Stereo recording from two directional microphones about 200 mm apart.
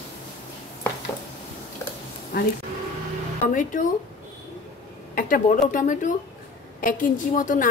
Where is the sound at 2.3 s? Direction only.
50° left (ahead or behind).